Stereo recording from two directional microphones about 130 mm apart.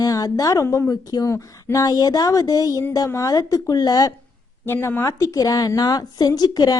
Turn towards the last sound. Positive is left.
turn(degrees=30)  # may be behind; listen again after turning